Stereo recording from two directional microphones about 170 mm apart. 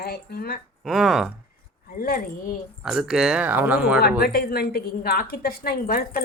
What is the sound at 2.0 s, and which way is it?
Speech, 60° left (ahead or behind).